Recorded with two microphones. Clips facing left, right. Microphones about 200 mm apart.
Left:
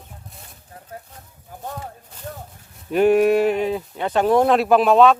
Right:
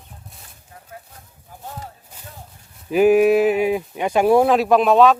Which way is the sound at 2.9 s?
5° right (ahead or behind).